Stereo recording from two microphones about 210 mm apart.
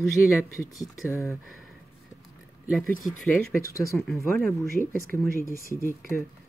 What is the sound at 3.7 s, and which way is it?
Speech, 15° left (ahead or behind).